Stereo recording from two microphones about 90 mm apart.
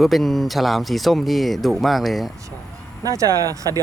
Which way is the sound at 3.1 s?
40° right (ahead or behind).